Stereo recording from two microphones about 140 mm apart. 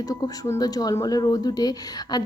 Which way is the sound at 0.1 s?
20° left (ahead or behind).